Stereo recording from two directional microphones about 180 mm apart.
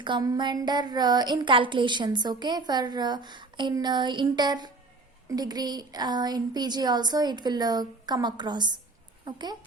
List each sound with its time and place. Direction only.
0.0 s speech: 25° right (ahead or behind)